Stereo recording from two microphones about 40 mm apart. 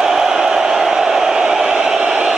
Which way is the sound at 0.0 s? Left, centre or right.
Centre.